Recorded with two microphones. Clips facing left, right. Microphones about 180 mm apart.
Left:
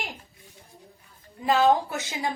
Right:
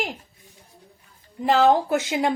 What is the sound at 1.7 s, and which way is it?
Speech, 85° right.